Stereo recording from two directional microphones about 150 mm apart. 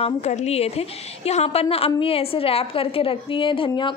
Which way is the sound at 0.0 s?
50° left (ahead or behind).